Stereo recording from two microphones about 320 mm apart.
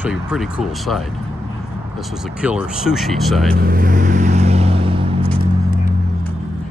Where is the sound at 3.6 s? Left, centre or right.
Right.